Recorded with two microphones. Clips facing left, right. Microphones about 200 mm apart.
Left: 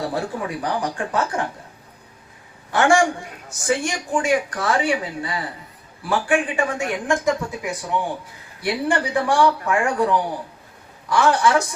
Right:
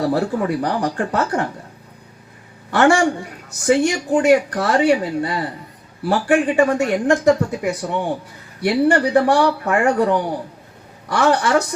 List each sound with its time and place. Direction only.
0.0 s speech: 65° right (ahead or behind)
2.6 s a man's voice: 65° right (ahead or behind)